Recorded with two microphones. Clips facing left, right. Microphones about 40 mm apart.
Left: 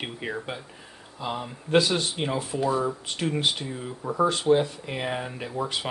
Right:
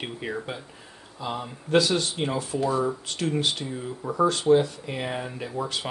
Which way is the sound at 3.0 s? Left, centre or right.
Left.